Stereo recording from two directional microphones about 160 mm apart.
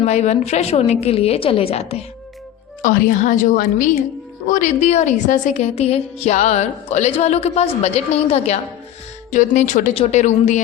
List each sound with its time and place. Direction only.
0.0 s a woman's voice: 45° left (ahead or behind)
2.8 s a woman's voice: 60° left (ahead or behind); by 8.5 s 40° left (ahead or behind)
9.3 s a woman's voice: 50° left (ahead or behind)